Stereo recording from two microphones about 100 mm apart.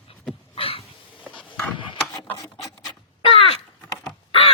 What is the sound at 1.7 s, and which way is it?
Wood, 55° left (ahead or behind).